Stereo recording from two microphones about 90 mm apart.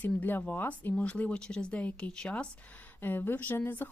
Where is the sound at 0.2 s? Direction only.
20° left (ahead or behind).